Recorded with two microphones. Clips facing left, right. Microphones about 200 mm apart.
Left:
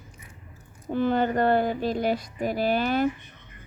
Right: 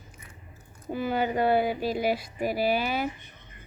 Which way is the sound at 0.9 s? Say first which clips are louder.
Left 4 dB; 10° right (ahead or behind).